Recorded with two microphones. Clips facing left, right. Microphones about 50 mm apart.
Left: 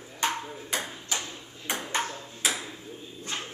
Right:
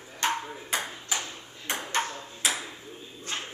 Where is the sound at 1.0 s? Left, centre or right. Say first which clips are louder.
Right 1 dB; centre.